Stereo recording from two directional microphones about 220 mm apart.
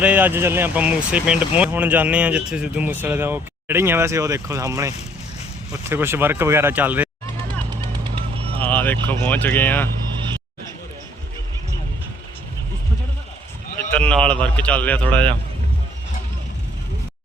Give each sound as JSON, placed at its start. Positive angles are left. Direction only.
{"t": 0.0, "sound": "speech", "side_deg": -5}
{"t": 8.0, "sound": "vehicle", "side_deg": -25}
{"t": 8.5, "sound": "vehicle", "side_deg": 10}
{"t": 9.0, "sound": "speech", "side_deg": 5}
{"t": 13.9, "sound": "speech", "side_deg": 5}